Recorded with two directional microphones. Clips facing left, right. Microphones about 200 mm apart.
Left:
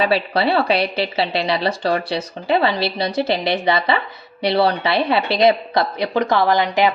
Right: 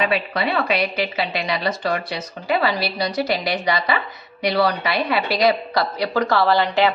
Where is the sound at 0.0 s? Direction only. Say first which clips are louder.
Left 4 dB; 30° left (ahead or behind).